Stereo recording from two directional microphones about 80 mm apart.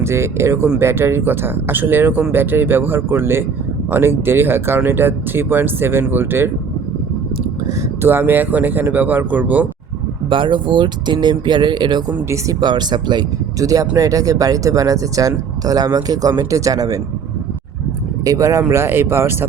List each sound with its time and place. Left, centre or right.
0.0 s speech: right
8.0 s speech: right
10.2 s speech: right
13.6 s speech: right
18.3 s speech: right